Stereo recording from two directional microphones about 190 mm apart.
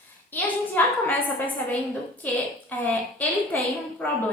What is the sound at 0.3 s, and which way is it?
A woman's voice, 10° left (ahead or behind).